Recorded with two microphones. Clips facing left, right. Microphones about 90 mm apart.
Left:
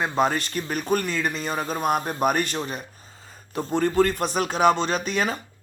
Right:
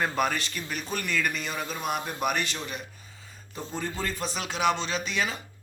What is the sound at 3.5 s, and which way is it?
A man's voice, 60° left (ahead or behind).